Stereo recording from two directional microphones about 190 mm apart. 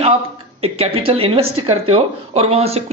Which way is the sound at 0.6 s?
30° right (ahead or behind).